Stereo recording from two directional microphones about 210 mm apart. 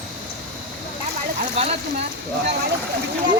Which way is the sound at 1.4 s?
30° right (ahead or behind).